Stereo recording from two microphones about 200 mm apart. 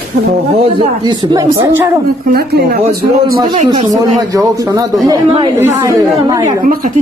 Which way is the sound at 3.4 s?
25° right (ahead or behind).